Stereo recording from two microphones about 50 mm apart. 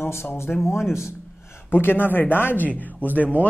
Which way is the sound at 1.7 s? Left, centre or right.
Left.